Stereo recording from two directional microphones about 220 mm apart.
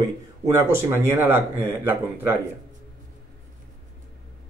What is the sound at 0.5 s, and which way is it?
Speech, 10° right (ahead or behind).